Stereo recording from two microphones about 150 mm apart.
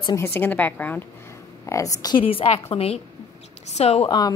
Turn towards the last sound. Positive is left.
turn(degrees=30)  # may be behind; listen again after turning